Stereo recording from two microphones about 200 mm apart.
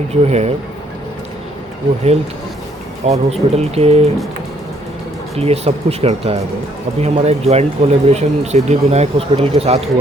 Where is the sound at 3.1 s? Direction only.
30° right (ahead or behind).